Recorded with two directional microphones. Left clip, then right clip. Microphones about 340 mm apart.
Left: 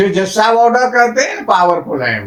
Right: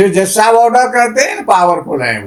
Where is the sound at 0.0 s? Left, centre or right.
Centre.